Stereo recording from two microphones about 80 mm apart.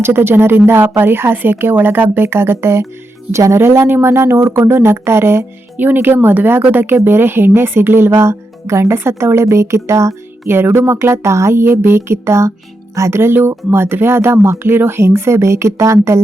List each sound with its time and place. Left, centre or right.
0.0 s a woman's voice: right